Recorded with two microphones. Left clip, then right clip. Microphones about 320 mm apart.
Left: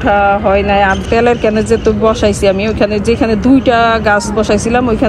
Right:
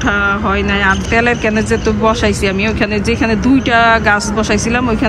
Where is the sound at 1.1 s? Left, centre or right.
Left.